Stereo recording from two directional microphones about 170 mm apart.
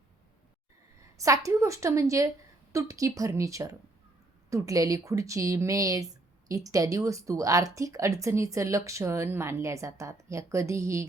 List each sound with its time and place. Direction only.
1.1 s speech: 20° right (ahead or behind)